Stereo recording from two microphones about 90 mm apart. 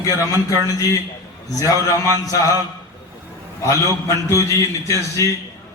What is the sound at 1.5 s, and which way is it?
Speech, 40° left (ahead or behind).